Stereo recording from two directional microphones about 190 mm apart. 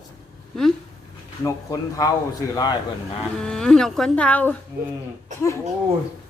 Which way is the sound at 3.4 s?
5° left (ahead or behind).